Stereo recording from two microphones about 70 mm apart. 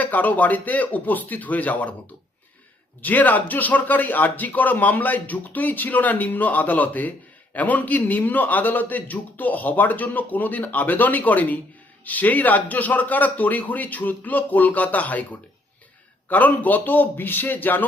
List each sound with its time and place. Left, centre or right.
0.0 s speech: left
3.0 s speech: left